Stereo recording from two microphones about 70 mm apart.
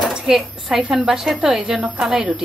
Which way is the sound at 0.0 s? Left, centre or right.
Centre.